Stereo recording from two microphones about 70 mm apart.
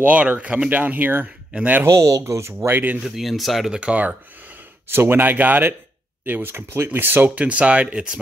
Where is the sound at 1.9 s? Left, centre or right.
Right.